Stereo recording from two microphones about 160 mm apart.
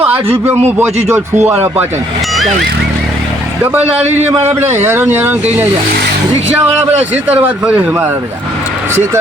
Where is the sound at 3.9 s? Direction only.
45° right (ahead or behind).